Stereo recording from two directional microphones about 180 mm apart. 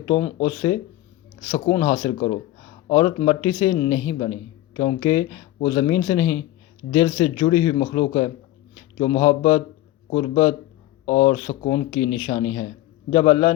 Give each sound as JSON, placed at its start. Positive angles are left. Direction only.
{"t": 0.4, "sound": "speech", "side_deg": 20}
{"t": 2.1, "sound": "speech", "side_deg": 35}
{"t": 2.9, "sound": "speech", "side_deg": 25}